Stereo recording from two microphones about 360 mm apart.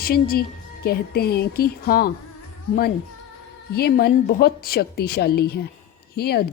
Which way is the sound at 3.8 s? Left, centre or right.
Left.